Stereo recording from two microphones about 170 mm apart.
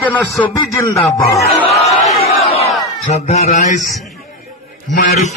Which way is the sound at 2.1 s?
35° left (ahead or behind).